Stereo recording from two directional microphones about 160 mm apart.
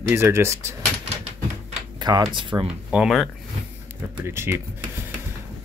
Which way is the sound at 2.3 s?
30° right (ahead or behind).